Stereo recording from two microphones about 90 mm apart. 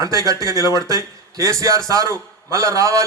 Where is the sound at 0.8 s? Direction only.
35° right (ahead or behind).